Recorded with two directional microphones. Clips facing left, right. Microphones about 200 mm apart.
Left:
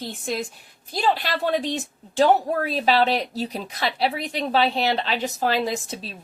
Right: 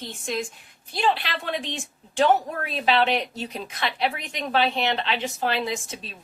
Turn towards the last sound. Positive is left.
turn(degrees=35)  # may be behind; listen again after turning